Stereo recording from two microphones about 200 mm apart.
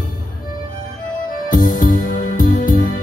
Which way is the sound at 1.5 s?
40° left (ahead or behind).